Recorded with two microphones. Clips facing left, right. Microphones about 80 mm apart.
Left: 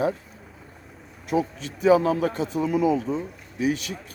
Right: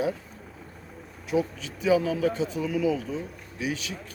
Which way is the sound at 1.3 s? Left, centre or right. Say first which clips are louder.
Left 2 dB; left.